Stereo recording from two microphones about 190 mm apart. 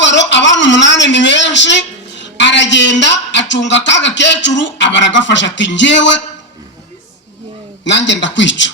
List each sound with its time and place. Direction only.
0.0 s a woman's voice: 70° left (ahead or behind)
7.9 s a woman's voice: 70° left (ahead or behind)